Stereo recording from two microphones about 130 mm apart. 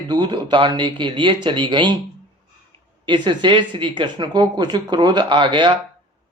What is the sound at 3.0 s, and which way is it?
Speech, 35° right (ahead or behind).